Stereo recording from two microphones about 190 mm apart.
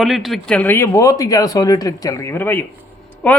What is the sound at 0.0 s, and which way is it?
Speech, centre (ahead or behind).